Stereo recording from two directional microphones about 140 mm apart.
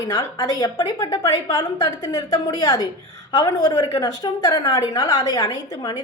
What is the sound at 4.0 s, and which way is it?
A woman's voice, 20° left (ahead or behind).